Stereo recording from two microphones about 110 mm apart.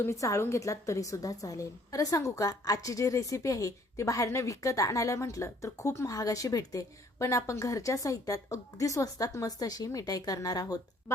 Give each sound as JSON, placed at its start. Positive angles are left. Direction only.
{"t": 0.0, "sound": "a woman's voice", "side_deg": 30}